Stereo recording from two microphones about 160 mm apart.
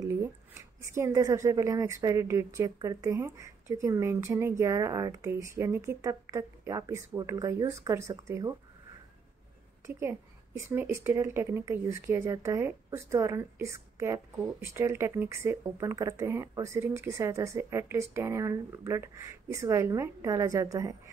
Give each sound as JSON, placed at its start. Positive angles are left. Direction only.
{"t": 0.0, "sound": "speech", "side_deg": -15}
{"t": 9.8, "sound": "a sound", "side_deg": -15}
{"t": 10.7, "sound": "speech", "side_deg": -15}